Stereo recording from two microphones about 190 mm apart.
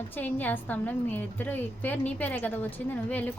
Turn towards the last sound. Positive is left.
turn(degrees=10)  # may be behind; listen again after turning